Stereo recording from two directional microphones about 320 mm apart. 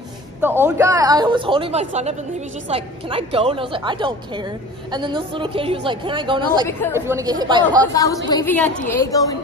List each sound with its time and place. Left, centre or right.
0.4 s speech: centre
7.8 s a woman's voice: centre